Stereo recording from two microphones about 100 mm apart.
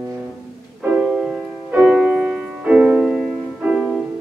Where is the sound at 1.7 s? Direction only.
15° right (ahead or behind).